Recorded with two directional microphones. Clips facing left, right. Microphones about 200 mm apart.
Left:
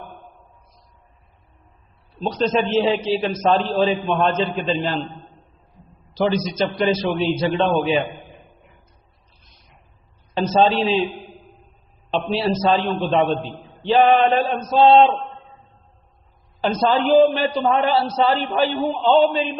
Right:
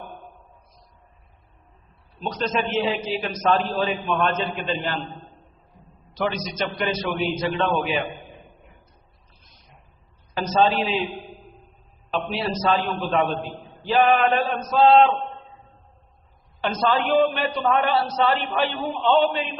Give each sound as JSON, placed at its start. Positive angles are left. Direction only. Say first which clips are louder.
{"t": 2.2, "sound": "a man's voice", "louder": "left 5 dB", "side_deg": 30}
{"t": 6.1, "sound": "a man's voice", "louder": "left 6 dB", "side_deg": 30}
{"t": 10.6, "sound": "a man's voice", "louder": "left 3 dB", "side_deg": 30}
{"t": 12.3, "sound": "a man's voice", "louder": "left 5 dB", "side_deg": 30}
{"t": 16.6, "sound": "a man's voice", "louder": "left 4 dB", "side_deg": 30}